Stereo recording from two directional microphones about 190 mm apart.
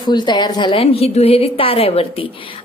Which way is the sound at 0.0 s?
25° left (ahead or behind).